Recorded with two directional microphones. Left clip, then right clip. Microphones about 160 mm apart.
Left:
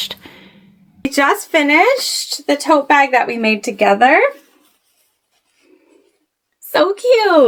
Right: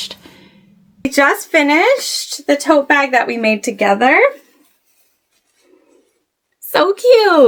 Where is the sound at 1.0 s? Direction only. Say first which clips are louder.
Right 2 dB; 5° right (ahead or behind); by 4.3 s 25° right (ahead or behind).